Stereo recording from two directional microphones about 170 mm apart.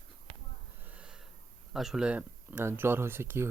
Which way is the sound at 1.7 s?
Centre (ahead or behind).